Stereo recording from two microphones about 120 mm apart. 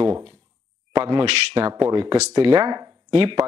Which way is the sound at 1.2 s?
50° right (ahead or behind).